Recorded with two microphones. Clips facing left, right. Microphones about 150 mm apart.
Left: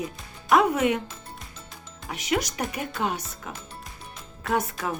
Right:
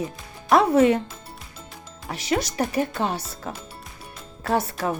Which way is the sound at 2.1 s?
30° right (ahead or behind).